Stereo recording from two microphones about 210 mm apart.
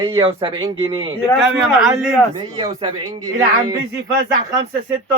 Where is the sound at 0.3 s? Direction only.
20° right (ahead or behind).